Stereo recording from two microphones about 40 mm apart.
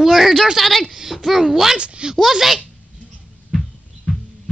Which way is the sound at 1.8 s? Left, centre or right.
Right.